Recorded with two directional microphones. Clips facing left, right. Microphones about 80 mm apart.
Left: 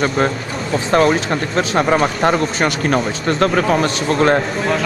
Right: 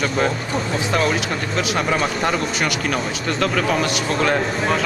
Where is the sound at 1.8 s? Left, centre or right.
Left.